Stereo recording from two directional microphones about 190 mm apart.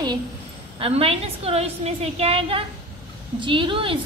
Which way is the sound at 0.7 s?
30° right (ahead or behind).